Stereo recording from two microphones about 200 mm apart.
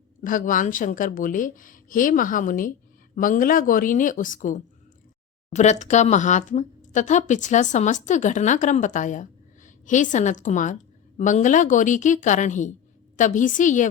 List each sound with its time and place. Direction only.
0.3 s speech: 40° left (ahead or behind)